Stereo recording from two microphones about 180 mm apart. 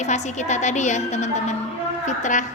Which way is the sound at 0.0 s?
40° left (ahead or behind).